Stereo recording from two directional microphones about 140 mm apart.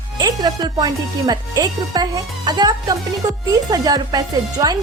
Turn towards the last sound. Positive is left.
turn(degrees=-30)  # may be behind; listen again after turning